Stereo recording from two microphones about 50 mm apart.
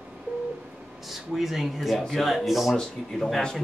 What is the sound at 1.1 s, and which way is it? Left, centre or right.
Speech, centre.